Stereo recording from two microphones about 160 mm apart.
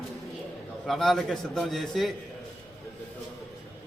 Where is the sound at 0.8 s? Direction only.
Centre (ahead or behind).